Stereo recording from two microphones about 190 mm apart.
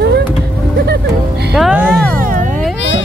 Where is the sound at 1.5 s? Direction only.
5° right (ahead or behind).